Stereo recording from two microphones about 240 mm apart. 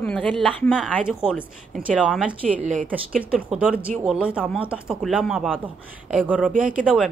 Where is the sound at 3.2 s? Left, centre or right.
Centre.